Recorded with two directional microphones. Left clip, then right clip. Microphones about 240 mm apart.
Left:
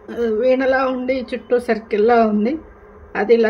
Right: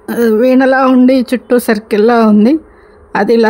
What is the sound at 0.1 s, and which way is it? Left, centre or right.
Speech, right.